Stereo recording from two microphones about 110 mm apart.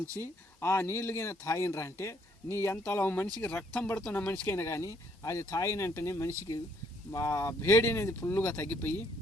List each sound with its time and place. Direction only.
0.6 s speech: 20° left (ahead or behind)